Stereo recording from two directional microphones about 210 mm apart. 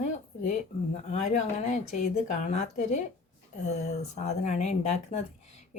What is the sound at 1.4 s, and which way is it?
Speech, 35° left (ahead or behind).